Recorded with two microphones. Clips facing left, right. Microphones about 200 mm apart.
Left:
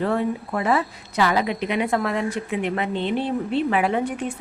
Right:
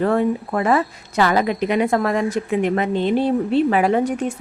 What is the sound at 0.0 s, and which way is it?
A woman's voice, 50° right (ahead or behind).